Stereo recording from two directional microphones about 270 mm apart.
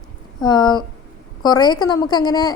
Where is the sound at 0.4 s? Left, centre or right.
Centre.